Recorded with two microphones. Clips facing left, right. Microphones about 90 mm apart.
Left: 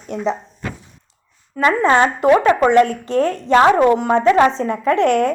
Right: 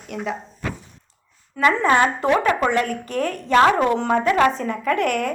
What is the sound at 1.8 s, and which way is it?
A woman's voice, 25° left (ahead or behind).